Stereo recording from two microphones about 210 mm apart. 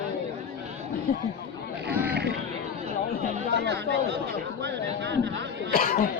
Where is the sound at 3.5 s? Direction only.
55° right (ahead or behind).